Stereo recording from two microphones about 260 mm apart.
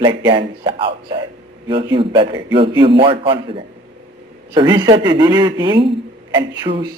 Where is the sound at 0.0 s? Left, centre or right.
Centre.